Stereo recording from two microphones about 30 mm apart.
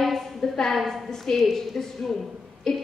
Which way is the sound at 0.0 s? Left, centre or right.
Centre.